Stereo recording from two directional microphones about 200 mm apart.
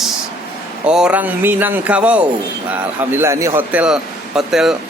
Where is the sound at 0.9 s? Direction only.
5° right (ahead or behind).